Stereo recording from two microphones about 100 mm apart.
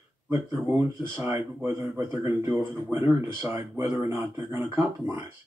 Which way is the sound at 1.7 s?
35° right (ahead or behind).